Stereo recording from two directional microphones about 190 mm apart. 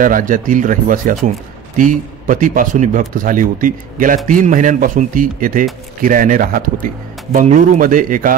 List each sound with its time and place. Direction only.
0.0 s a man's voice: 45° right (ahead or behind)